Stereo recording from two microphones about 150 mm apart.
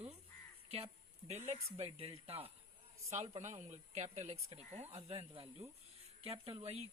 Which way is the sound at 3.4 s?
55° right (ahead or behind).